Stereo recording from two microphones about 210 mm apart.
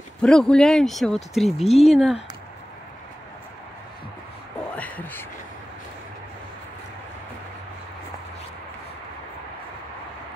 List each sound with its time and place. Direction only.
0.2 s speech: 5° left (ahead or behind)
1.7 s speech: 30° left (ahead or behind)
4.7 s a sound: 10° left (ahead or behind)